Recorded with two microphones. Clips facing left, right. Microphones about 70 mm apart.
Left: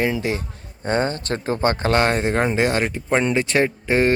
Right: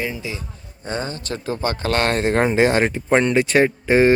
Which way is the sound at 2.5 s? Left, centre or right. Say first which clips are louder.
Right 3 dB; centre.